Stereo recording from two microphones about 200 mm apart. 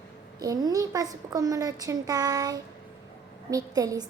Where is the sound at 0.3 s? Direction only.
20° right (ahead or behind).